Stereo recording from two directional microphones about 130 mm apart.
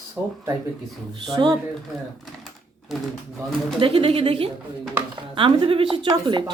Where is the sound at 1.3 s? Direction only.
35° right (ahead or behind).